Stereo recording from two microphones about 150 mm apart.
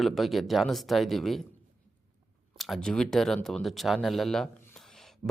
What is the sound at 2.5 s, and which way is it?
Speech, centre (ahead or behind).